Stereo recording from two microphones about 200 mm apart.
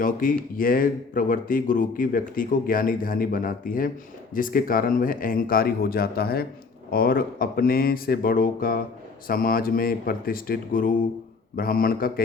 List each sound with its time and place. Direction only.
0.0 s speech: 45° left (ahead or behind)